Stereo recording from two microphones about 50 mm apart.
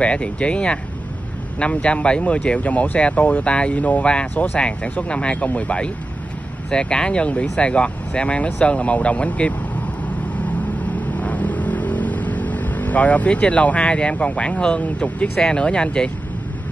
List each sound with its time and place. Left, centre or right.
0.0 s speech: left
4.1 s speech: left
11.1 s vehicle: left
15.3 s speech: centre